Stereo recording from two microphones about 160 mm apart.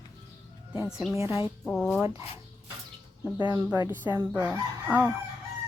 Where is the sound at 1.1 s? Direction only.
15° right (ahead or behind).